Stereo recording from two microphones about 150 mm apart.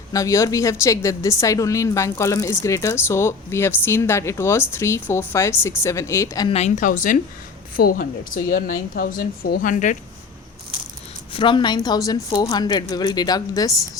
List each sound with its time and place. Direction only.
0.1 s a woman's voice: 20° left (ahead or behind)
6.5 s a woman's voice: 50° left (ahead or behind)
11.3 s a woman's voice: 30° left (ahead or behind)